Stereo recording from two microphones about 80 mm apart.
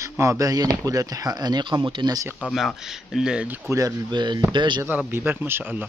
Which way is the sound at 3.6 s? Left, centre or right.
Right.